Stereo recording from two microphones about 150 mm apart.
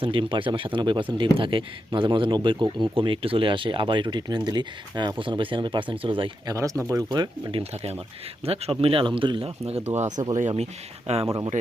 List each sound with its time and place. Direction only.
0.0 s speech: 35° right (ahead or behind)
6.5 s speech: 20° right (ahead or behind)
8.4 s speech: 40° right (ahead or behind)
10.1 s speech: 25° right (ahead or behind)
10.6 s speech: 45° right (ahead or behind)
11.5 s speech: 60° right (ahead or behind)